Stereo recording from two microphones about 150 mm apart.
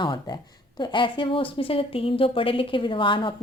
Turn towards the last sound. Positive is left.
turn(degrees=35)  # may be behind; listen again after turning